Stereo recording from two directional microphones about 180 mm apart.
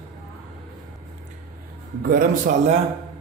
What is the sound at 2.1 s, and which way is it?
Speech, 45° right (ahead or behind).